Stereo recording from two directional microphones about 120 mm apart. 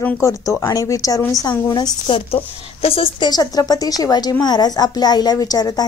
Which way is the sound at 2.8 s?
50° left (ahead or behind).